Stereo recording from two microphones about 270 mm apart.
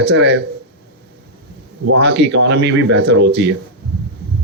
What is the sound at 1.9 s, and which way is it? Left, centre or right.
Speech, right.